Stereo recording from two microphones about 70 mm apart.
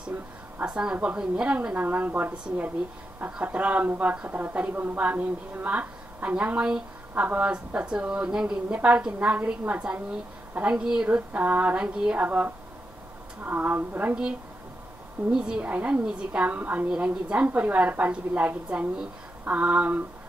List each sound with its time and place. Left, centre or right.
0.7 s a woman's voice: centre
11.1 s a woman's voice: right
12.3 s a woman's voice: right
15.3 s a woman's voice: centre